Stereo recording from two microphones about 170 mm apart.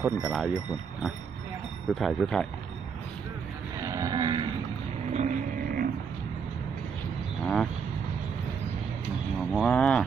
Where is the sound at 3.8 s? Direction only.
20° right (ahead or behind).